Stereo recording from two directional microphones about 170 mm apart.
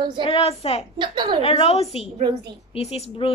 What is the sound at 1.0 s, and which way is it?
Speech, 30° right (ahead or behind).